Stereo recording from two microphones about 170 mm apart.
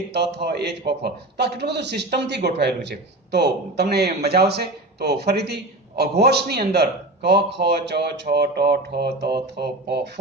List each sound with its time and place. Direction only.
0.1 s a man's voice: 75° right (ahead or behind)